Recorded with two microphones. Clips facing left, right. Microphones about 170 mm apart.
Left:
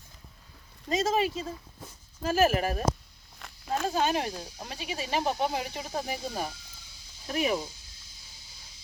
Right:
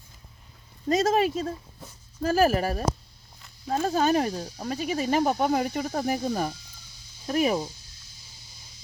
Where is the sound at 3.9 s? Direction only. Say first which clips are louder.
Right 6 dB; 40° right (ahead or behind).